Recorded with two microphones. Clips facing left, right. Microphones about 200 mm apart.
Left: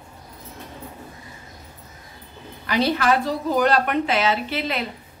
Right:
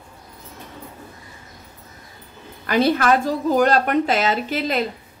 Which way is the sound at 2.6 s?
50° right (ahead or behind).